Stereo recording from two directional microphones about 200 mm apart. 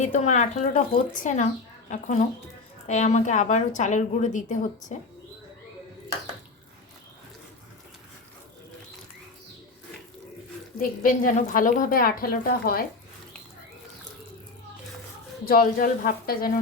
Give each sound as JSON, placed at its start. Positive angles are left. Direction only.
{"t": 0.0, "sound": "a woman's voice", "side_deg": 35}
{"t": 10.8, "sound": "a woman's voice", "side_deg": 45}
{"t": 15.4, "sound": "a woman's voice", "side_deg": 45}